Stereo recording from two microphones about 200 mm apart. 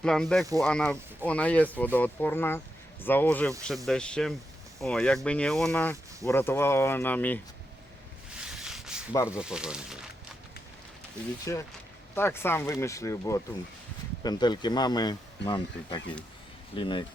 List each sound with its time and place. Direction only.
0.0 s speech: 5° left (ahead or behind)
8.3 s a sound: 5° right (ahead or behind)
9.3 s speech: 5° right (ahead or behind)
11.5 s speech: 15° left (ahead or behind)